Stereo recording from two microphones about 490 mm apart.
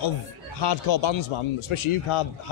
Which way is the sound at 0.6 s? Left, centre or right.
Left.